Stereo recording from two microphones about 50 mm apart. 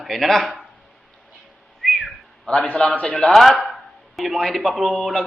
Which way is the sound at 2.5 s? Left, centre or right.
Centre.